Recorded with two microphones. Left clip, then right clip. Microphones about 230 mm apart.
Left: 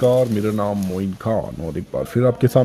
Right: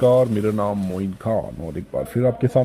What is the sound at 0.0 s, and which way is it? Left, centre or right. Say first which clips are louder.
Speech: even; centre.